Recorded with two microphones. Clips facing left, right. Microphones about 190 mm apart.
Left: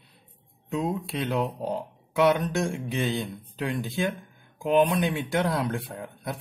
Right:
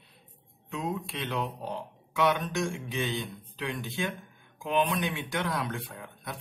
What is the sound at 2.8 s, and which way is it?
Speech, 35° left (ahead or behind).